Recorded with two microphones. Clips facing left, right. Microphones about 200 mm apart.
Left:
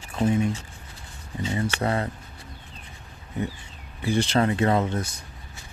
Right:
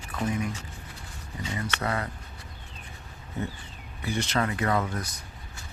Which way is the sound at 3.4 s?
15° left (ahead or behind).